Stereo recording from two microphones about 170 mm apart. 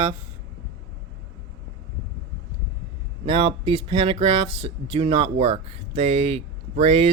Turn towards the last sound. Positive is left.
turn(degrees=-40)  # may be behind; listen again after turning